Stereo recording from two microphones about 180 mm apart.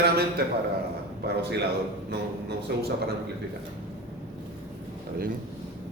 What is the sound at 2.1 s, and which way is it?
Speech, 65° right (ahead or behind).